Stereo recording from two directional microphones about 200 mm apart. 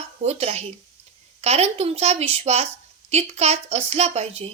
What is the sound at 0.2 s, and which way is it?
Speech, 30° right (ahead or behind).